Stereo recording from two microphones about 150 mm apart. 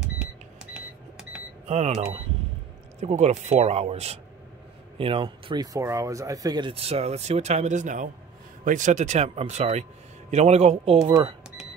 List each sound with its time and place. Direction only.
1.7 s speech: 45° right (ahead or behind); by 6.7 s 25° right (ahead or behind)
6.7 s speech: 40° right (ahead or behind)
11.1 s speech: 30° right (ahead or behind)